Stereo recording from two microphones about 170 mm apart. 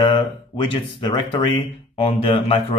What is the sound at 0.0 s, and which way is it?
Speech, 25° left (ahead or behind).